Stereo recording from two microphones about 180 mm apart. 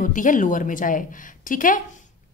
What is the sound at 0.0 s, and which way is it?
A woman's voice, 45° left (ahead or behind).